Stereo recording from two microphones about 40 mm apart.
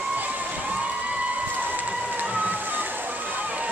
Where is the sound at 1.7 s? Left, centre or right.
Right.